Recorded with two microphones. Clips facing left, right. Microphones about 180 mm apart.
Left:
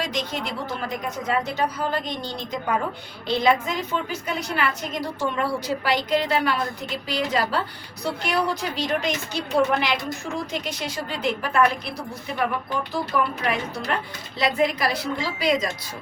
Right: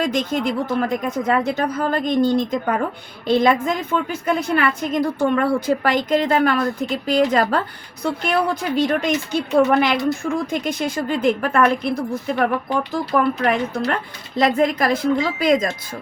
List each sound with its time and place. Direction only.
0.0 s a woman's voice: 50° right (ahead or behind)